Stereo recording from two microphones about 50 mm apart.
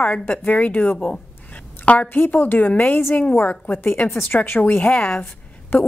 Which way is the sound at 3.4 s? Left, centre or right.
Left.